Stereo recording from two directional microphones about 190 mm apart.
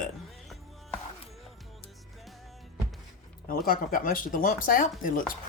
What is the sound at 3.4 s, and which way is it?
Speech, 50° left (ahead or behind).